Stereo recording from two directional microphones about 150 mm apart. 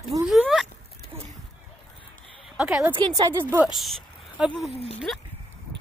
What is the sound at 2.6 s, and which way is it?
Speech, 5° right (ahead or behind).